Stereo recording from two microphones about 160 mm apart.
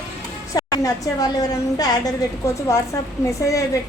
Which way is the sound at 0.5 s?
20° left (ahead or behind).